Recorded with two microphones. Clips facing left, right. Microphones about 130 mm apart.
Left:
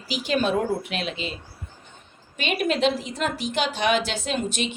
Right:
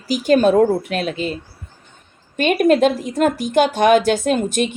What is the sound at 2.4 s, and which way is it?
Speech, 50° right (ahead or behind).